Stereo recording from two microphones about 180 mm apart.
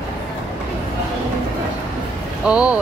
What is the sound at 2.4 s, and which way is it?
Speech, 5° right (ahead or behind).